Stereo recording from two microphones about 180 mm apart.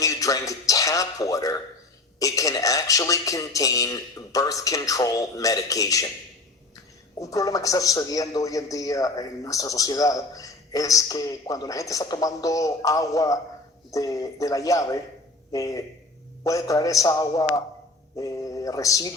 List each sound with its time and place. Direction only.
0.0 s speech: 20° left (ahead or behind)
7.2 s speech: 20° left (ahead or behind)